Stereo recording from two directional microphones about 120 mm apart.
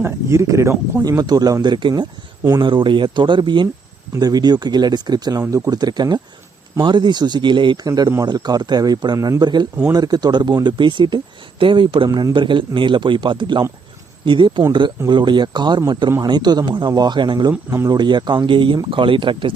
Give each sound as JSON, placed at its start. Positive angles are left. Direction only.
{"t": 0.0, "sound": "speech", "side_deg": -25}
{"t": 1.2, "sound": "speech", "side_deg": -35}